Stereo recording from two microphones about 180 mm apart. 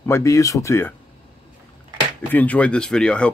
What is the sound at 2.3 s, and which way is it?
Speech, 10° left (ahead or behind).